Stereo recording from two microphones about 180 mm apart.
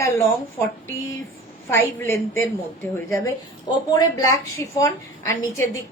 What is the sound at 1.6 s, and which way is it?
Speech, 15° left (ahead or behind).